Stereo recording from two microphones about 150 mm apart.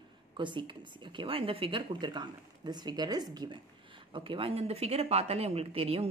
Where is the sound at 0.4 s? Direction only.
30° right (ahead or behind).